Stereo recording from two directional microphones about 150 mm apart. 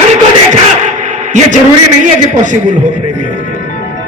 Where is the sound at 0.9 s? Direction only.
55° right (ahead or behind).